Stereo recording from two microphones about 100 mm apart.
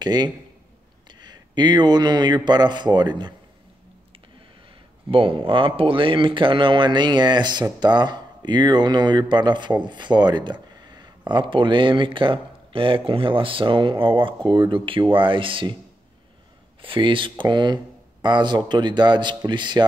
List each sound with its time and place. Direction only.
0.0 s speech: 45° right (ahead or behind)
5.1 s speech: 65° right (ahead or behind)
16.8 s speech: 55° right (ahead or behind)